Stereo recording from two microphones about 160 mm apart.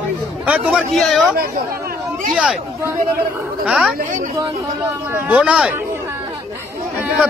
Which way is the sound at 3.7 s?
5° right (ahead or behind).